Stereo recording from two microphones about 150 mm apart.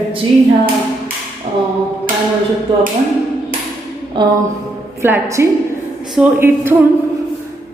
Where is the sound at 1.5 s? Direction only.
35° right (ahead or behind).